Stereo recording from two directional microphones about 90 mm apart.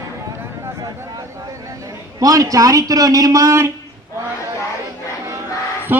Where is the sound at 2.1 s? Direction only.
40° right (ahead or behind).